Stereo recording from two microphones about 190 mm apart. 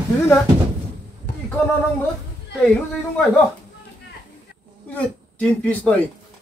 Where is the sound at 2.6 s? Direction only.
5° left (ahead or behind).